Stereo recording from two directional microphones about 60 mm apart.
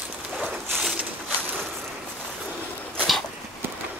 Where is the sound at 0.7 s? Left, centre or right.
Centre.